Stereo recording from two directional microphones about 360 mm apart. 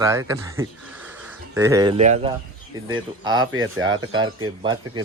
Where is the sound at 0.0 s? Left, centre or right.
Centre.